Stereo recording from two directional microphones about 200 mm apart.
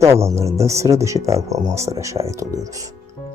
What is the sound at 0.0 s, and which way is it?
Speech, 15° right (ahead or behind).